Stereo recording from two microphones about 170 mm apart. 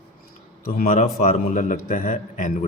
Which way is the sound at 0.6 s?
55° left (ahead or behind).